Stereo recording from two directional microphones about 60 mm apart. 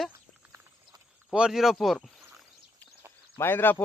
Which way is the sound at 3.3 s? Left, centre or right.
Left.